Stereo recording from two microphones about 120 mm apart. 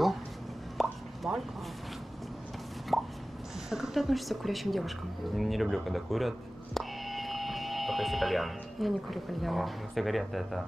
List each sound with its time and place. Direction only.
0.7 s plop: centre (ahead or behind)
2.9 s plop: centre (ahead or behind)
3.7 s speech: centre (ahead or behind)